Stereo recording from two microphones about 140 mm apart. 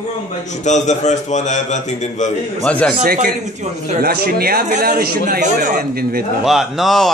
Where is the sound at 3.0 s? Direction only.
90° right.